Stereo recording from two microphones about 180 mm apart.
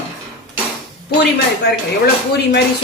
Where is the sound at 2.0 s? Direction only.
65° left (ahead or behind).